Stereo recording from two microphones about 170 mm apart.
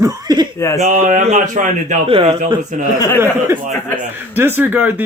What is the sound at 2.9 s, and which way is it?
Speech, 20° left (ahead or behind).